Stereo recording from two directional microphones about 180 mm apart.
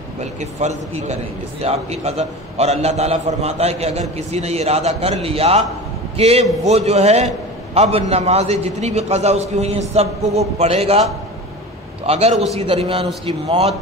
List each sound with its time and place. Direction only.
0.2 s a man's voice: 40° right (ahead or behind)
12.1 s a man's voice: 35° right (ahead or behind)